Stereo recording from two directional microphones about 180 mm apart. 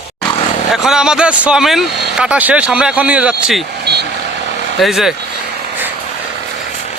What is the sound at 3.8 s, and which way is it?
Vehicle, 65° right (ahead or behind).